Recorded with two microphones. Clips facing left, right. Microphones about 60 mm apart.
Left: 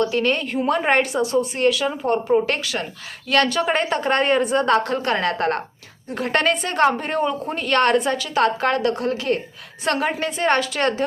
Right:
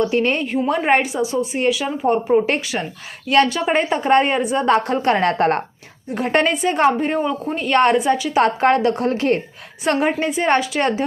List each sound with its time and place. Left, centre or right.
0.0 s a woman's voice: right
0.7 s a woman's voice: centre; by 5.6 s right
6.1 s a woman's voice: right
8.4 s a woman's voice: right
9.8 s a woman's voice: right